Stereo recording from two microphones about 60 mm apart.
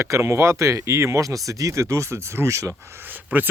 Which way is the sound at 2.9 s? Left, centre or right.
Right.